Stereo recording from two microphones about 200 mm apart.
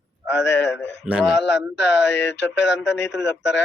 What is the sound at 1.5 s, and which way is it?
Speech, 60° left (ahead or behind).